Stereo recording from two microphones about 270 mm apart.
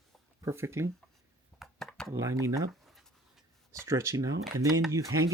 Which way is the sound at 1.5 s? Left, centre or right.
Centre.